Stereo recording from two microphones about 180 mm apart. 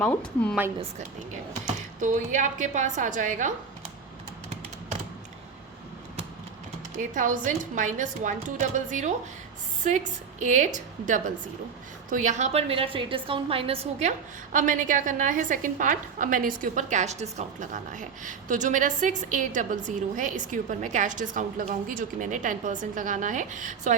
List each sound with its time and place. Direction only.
0.0 s a woman's voice: 5° left (ahead or behind)
1.6 s a woman's voice: 45° right (ahead or behind)
7.0 s a woman's voice: 45° right (ahead or behind)
12.0 s a woman's voice: 45° right (ahead or behind)
14.5 s a woman's voice: 50° right (ahead or behind)